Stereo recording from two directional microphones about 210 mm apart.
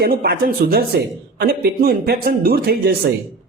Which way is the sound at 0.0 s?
45° right (ahead or behind).